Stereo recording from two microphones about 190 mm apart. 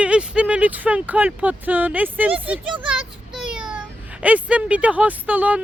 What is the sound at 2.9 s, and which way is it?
Child singing, 5° right (ahead or behind).